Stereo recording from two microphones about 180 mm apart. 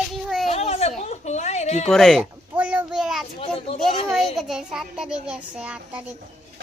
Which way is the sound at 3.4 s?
30° left (ahead or behind).